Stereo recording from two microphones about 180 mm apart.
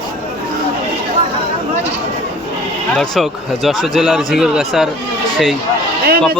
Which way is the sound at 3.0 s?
Centre (ahead or behind).